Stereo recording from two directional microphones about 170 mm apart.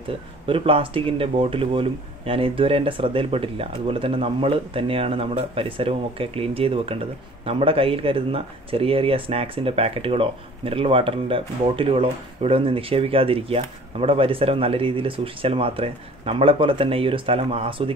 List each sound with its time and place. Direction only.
0.5 s speech: 35° right (ahead or behind)